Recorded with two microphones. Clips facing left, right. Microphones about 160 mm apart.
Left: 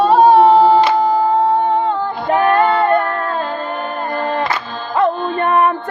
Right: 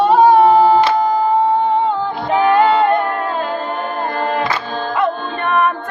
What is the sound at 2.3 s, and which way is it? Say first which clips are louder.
Music: even; 20° right (ahead or behind).